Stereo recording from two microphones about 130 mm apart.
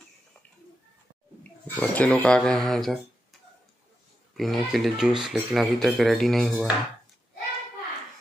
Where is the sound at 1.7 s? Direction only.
10° left (ahead or behind).